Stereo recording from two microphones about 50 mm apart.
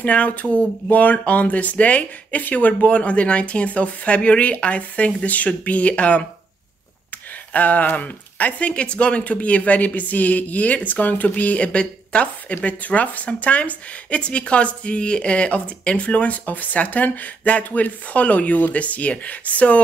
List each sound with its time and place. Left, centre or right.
0.0 s speech: left
7.5 s speech: left